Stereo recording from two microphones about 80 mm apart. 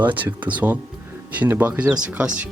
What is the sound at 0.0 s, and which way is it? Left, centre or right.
Speech, right.